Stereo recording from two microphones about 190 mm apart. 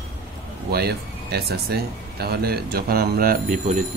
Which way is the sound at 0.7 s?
55° right (ahead or behind).